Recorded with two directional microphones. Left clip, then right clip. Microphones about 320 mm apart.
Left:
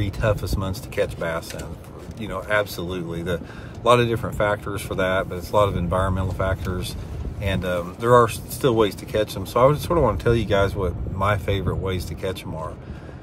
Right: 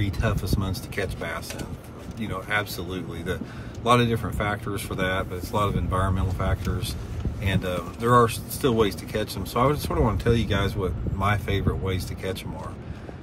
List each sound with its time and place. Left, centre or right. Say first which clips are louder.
0.0 s speech: left 5 dB; centre